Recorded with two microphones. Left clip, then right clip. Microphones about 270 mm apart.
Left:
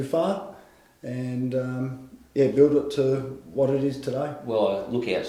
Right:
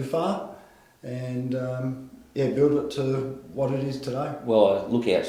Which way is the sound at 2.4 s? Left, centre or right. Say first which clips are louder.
Left 3 dB; left.